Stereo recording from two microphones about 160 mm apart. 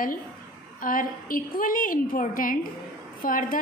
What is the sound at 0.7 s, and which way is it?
A woman's voice, 60° left (ahead or behind).